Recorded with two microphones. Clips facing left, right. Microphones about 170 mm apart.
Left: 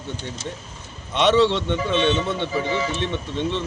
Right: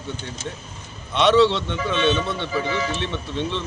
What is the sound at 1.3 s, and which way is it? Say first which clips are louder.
Speech: right 1 dB; 15° left (ahead or behind).